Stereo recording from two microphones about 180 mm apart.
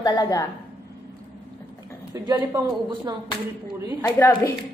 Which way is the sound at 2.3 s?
20° right (ahead or behind).